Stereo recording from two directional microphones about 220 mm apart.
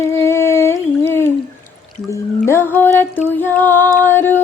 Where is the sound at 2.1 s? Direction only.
10° left (ahead or behind).